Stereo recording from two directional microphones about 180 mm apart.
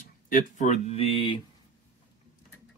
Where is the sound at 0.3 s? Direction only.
45° left (ahead or behind); by 1.4 s 30° left (ahead or behind).